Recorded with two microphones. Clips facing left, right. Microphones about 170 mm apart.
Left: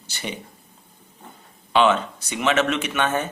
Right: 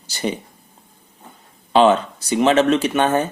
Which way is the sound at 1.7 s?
35° right (ahead or behind).